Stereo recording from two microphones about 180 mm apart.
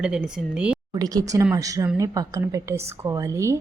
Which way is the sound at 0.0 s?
5° right (ahead or behind).